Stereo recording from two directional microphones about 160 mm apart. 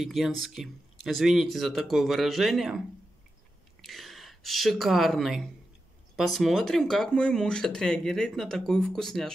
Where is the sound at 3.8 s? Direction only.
Centre (ahead or behind).